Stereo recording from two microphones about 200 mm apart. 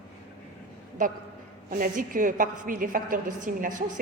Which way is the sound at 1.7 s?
40° right (ahead or behind).